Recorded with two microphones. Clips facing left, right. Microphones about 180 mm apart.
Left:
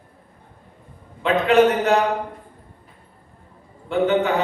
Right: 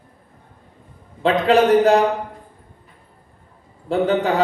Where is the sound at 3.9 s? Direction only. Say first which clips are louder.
Right 1 dB; 35° right (ahead or behind).